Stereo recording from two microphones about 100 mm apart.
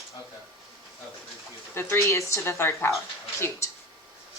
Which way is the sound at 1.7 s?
25° left (ahead or behind).